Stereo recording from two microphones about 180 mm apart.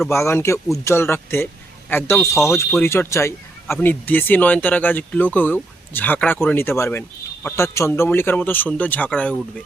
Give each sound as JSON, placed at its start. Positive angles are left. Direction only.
{"t": 0.1, "sound": "speech", "side_deg": 15}